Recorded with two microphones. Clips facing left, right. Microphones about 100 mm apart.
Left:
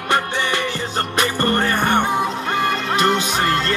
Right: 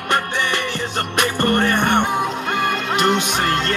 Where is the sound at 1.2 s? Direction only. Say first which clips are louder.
Right 2 dB; 35° left (ahead or behind).